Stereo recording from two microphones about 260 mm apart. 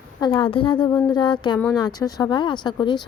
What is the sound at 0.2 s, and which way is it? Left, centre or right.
A woman's voice, centre.